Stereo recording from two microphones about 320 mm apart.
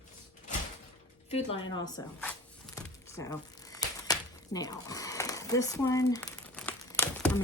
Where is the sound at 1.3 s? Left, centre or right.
Centre.